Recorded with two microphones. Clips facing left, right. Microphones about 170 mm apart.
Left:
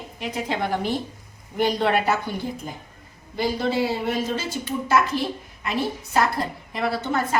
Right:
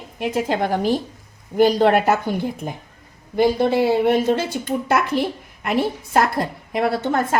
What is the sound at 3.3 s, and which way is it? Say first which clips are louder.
Speech: right 7 dB; 55° right (ahead or behind).